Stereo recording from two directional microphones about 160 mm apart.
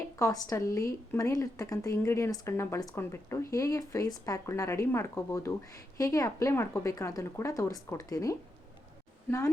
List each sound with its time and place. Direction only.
0.2 s speech: 20° left (ahead or behind)